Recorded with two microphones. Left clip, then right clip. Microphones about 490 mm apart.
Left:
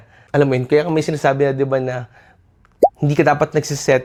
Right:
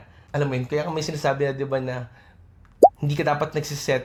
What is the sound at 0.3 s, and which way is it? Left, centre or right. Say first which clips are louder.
Speech: left 11 dB; left.